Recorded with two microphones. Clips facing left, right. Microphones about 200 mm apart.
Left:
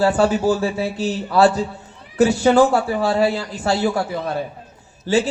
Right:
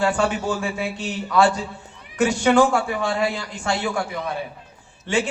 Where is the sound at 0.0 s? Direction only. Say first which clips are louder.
Left 5 dB; 35° left (ahead or behind).